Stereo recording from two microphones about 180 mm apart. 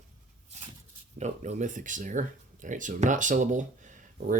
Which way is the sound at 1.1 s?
40° right (ahead or behind).